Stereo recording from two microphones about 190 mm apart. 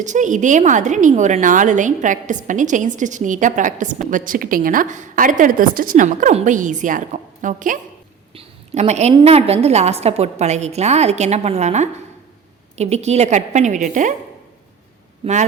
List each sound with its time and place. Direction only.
0.0 s a woman's voice: 40° right (ahead or behind)
8.3 s a woman's voice: 35° right (ahead or behind)
15.2 s speech: 40° right (ahead or behind)